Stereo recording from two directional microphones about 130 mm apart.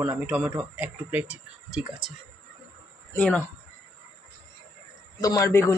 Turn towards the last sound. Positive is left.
turn(degrees=25)  # may be behind; listen again after turning